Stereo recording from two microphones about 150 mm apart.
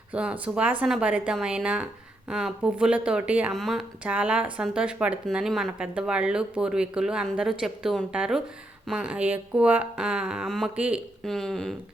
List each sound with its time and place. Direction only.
0.1 s speech: 5° right (ahead or behind)
11.2 s speech: 5° left (ahead or behind)